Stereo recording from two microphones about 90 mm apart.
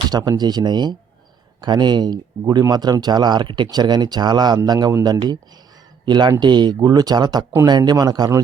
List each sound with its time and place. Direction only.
0.1 s speech: 45° right (ahead or behind)
6.1 s speech: 55° right (ahead or behind)